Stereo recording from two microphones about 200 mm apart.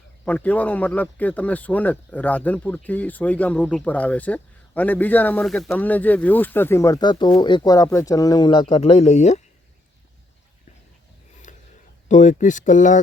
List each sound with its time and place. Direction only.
0.3 s a man's voice: 10° left (ahead or behind); by 9.4 s 35° left (ahead or behind)
12.0 s speech: 35° left (ahead or behind)